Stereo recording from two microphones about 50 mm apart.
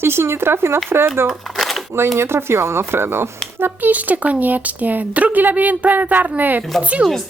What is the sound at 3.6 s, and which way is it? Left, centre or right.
Speech, right.